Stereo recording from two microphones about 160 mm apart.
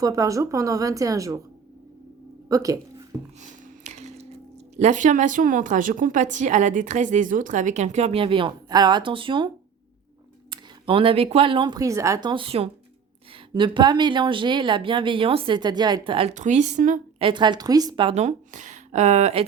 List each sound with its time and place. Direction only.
0.0 s speech: 20° right (ahead or behind)
2.5 s speech: 20° right (ahead or behind)
3.4 s a sound: 45° right (ahead or behind)
4.8 s a woman's voice: 50° right (ahead or behind); by 9.5 s 30° right (ahead or behind)
10.5 s speech: 35° right (ahead or behind)
12.3 s speech: 35° right (ahead or behind)
16.3 s a woman's voice: 50° right (ahead or behind)
17.2 s speech: 30° right (ahead or behind)
18.2 s speech: 50° right (ahead or behind)